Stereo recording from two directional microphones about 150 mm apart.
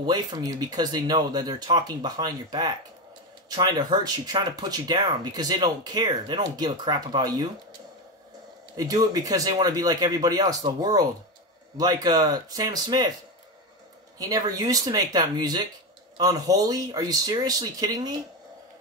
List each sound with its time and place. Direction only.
0.0 s speech: 25° right (ahead or behind)
8.7 s speech: 25° right (ahead or behind)
14.1 s speech: 25° right (ahead or behind)